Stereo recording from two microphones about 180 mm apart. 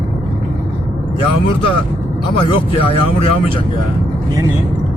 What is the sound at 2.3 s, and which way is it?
Speech, 30° left (ahead or behind).